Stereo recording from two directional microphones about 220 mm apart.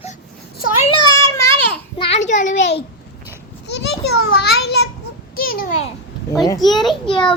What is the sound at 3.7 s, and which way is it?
Children playing, 50° left (ahead or behind).